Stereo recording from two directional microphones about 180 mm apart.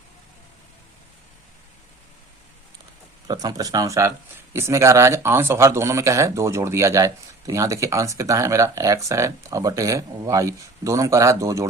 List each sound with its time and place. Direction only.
3.2 s speech: 20° right (ahead or behind)